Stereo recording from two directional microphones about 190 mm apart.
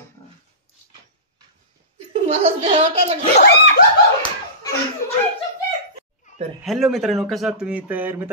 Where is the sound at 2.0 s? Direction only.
35° right (ahead or behind).